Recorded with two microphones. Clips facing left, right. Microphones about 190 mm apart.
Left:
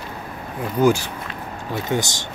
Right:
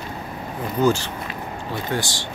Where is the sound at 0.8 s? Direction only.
10° left (ahead or behind).